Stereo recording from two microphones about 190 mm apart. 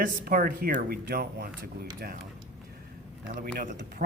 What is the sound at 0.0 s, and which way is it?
Speech, 50° right (ahead or behind).